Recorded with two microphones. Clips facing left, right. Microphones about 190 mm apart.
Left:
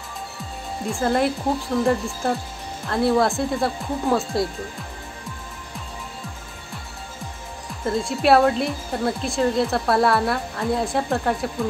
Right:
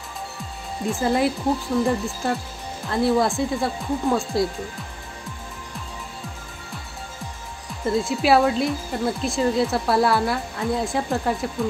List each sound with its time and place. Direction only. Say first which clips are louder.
0.8 s speech: even; centre (ahead or behind)
7.8 s speech: even; centre (ahead or behind)